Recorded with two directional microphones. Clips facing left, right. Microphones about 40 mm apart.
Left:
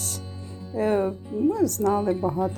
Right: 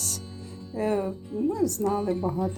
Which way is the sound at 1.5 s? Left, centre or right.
Left.